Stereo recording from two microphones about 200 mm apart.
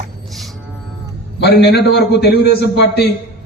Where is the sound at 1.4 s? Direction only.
55° left (ahead or behind).